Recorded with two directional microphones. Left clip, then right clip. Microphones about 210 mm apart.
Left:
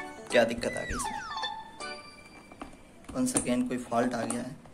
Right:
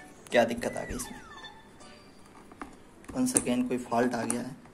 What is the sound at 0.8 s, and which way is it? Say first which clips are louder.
Music: left 6 dB; 45° left (ahead or behind).